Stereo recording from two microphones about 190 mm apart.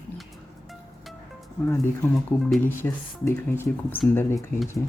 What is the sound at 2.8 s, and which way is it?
Speech, 15° left (ahead or behind).